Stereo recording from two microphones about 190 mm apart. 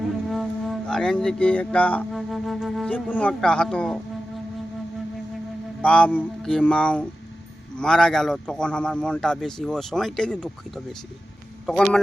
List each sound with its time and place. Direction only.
0.3 s speech: centre (ahead or behind)
5.8 s speech: 5° left (ahead or behind)
11.6 s speech: 5° left (ahead or behind)